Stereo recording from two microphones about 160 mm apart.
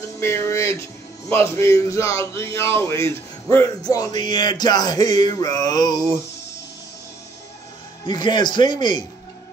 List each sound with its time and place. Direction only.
0.2 s speech: 15° left (ahead or behind)
3.8 s music: 25° left (ahead or behind)
8.0 s music: 30° left (ahead or behind)